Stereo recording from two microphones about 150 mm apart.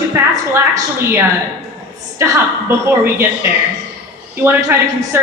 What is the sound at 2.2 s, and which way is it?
A woman's voice, 15° right (ahead or behind).